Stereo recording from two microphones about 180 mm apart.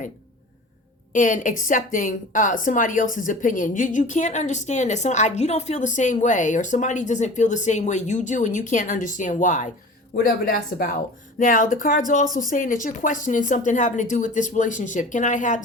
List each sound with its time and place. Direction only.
1.1 s a woman's voice: 45° left (ahead or behind)